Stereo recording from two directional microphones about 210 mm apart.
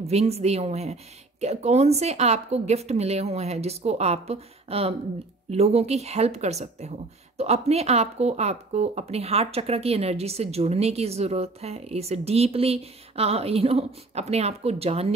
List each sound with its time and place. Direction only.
0.0 s a woman's voice: 30° right (ahead or behind)